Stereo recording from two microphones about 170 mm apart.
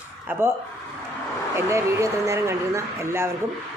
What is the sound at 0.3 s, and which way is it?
Speech, 10° right (ahead or behind).